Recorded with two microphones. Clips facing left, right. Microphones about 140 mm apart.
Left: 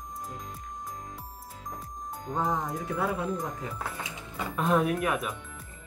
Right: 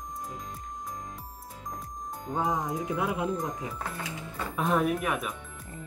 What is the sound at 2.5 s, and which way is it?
Speech, 20° right (ahead or behind).